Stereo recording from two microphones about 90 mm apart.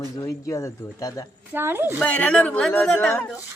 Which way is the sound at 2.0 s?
15° left (ahead or behind).